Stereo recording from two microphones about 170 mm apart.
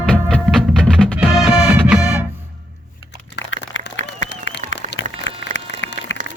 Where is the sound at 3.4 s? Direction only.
90° left.